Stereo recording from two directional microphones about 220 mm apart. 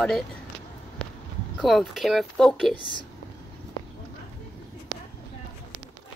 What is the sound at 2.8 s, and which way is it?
Speech, 20° left (ahead or behind).